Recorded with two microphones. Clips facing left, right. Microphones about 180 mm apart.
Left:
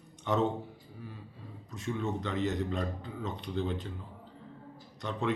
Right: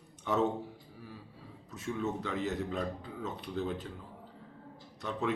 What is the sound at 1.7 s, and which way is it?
Speech, 5° right (ahead or behind).